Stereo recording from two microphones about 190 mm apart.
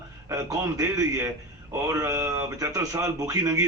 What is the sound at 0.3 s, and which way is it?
A man's voice, 15° right (ahead or behind).